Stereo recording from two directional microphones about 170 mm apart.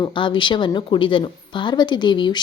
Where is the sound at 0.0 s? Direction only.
30° left (ahead or behind).